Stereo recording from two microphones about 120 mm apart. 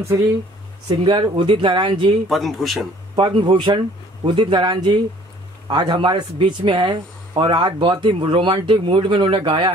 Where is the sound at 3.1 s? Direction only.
40° right (ahead or behind).